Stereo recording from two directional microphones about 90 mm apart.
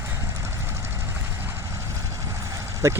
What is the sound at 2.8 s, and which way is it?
Speech, 35° right (ahead or behind).